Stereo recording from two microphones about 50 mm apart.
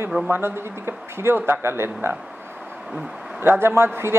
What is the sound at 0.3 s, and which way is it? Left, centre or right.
A man's voice, right.